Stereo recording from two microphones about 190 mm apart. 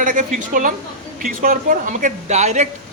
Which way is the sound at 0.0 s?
45° right (ahead or behind).